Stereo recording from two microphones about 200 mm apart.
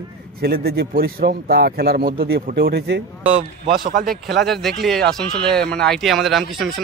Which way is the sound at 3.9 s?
40° right (ahead or behind).